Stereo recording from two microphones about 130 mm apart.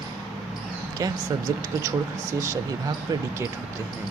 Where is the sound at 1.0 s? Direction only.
25° right (ahead or behind).